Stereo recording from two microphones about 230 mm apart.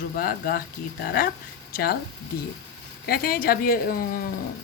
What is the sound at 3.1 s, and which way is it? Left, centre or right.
Speech, left.